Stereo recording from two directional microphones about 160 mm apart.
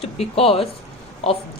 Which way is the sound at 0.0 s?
40° left (ahead or behind).